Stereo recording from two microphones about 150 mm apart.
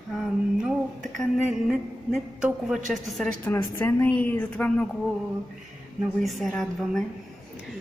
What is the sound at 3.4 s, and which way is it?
A woman's voice, 15° left (ahead or behind).